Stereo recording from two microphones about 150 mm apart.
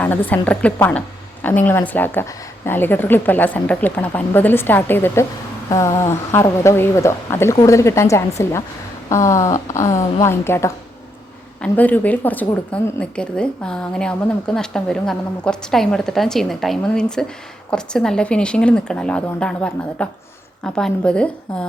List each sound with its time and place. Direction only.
0.0 s a woman's voice: 10° left (ahead or behind)